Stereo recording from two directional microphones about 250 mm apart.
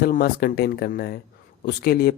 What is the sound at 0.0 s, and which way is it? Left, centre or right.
Speech, left.